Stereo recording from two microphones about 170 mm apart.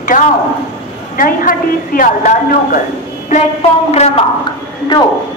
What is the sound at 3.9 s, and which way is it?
Speech, 40° left (ahead or behind).